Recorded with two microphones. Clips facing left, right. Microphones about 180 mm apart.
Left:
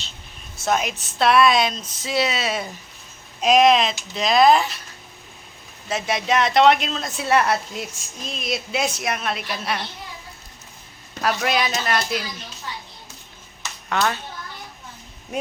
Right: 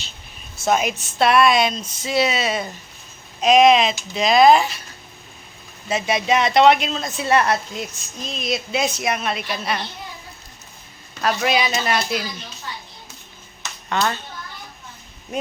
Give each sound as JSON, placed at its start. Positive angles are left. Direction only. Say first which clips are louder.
{"t": 0.5, "sound": "speech", "louder": "right 3 dB", "side_deg": 0}
{"t": 5.9, "sound": "speech", "louder": "right 2 dB", "side_deg": 0}
{"t": 11.2, "sound": "speech", "louder": "right 2 dB", "side_deg": 0}
{"t": 13.6, "sound": "dishes", "louder": "even", "side_deg": 5}